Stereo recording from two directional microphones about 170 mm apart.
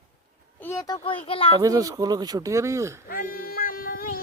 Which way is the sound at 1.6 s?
20° right (ahead or behind).